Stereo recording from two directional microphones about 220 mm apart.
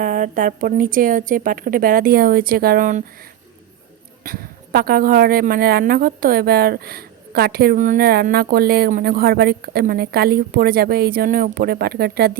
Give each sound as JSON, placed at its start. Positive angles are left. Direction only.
{"t": 0.0, "sound": "a woman's voice", "side_deg": -40}
{"t": 4.2, "sound": "a woman's voice", "side_deg": -40}